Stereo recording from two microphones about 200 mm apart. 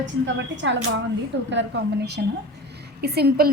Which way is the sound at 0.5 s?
65° right (ahead or behind).